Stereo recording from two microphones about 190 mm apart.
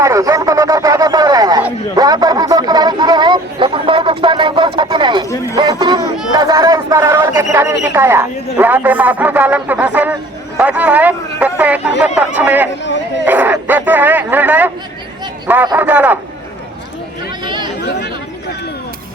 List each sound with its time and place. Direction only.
0.0 s a sound: 15° right (ahead or behind)
5.5 s a man's voice: 25° right (ahead or behind); by 10.2 s 10° right (ahead or behind)
10.6 s a sound: 5° right (ahead or behind)
12.8 s dog: 70° left (ahead or behind)
13.2 s a man's voice: 10° right (ahead or behind)
17.4 s chatter: 25° right (ahead or behind)